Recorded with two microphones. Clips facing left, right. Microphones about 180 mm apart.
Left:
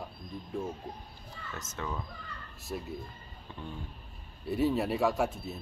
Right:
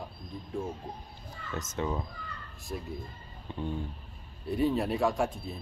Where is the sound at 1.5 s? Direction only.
25° right (ahead or behind).